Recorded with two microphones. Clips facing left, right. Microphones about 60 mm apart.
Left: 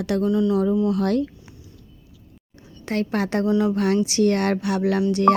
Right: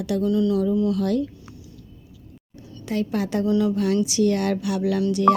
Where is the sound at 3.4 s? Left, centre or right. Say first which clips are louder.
Even; left.